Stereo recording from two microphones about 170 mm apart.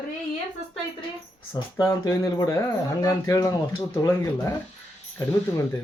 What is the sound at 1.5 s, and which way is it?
Speech, 20° left (ahead or behind).